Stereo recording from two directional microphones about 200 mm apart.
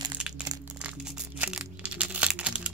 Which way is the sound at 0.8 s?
5° right (ahead or behind).